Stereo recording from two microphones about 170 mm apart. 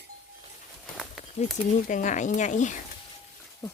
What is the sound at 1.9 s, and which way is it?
Speech, 45° left (ahead or behind).